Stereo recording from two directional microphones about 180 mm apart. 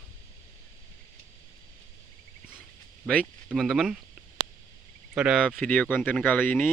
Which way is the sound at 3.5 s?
Centre (ahead or behind).